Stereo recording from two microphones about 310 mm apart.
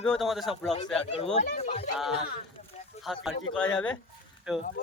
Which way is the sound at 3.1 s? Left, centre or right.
Centre.